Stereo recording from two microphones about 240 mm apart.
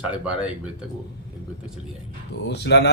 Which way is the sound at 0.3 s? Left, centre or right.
Centre.